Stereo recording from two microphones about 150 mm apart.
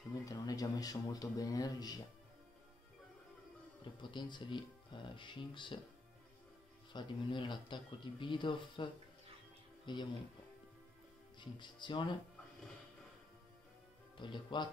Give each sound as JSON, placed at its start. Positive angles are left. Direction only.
{"t": 0.2, "sound": "speech", "side_deg": 25}
{"t": 4.0, "sound": "speech", "side_deg": 30}
{"t": 6.9, "sound": "speech", "side_deg": 30}
{"t": 11.3, "sound": "speech", "side_deg": 30}
{"t": 14.1, "sound": "speech", "side_deg": 30}